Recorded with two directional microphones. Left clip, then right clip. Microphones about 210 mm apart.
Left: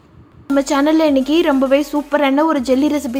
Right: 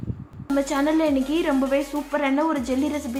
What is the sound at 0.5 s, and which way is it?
A woman's voice, 40° left (ahead or behind).